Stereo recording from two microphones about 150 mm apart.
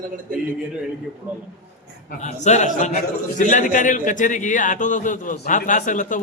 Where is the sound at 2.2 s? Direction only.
50° left (ahead or behind).